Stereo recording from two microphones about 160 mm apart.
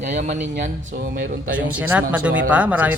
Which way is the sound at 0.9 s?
60° right (ahead or behind).